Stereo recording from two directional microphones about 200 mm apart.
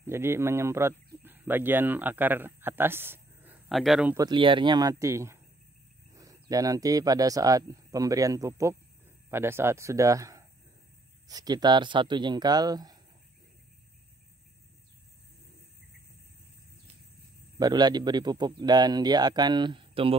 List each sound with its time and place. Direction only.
0.0 s a man's voice: 10° right (ahead or behind)
3.6 s speech: centre (ahead or behind)
4.1 s a man's voice: 20° right (ahead or behind)
17.6 s a man's voice: 20° right (ahead or behind)